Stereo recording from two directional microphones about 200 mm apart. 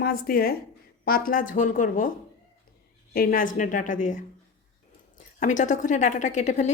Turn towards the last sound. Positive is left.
turn(degrees=35)  # may be behind; listen again after turning